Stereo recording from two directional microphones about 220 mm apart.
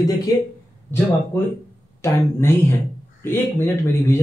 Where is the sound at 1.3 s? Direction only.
10° left (ahead or behind).